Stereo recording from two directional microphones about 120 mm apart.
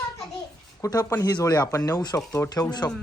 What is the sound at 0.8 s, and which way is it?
Speech, 30° left (ahead or behind).